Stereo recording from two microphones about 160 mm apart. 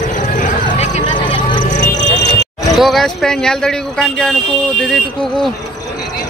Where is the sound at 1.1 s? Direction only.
30° left (ahead or behind).